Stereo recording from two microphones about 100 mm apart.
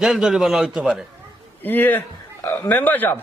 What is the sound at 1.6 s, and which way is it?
Speech, 20° left (ahead or behind).